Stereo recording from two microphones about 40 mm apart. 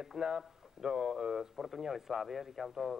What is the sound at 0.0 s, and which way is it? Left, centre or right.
A man's voice, centre.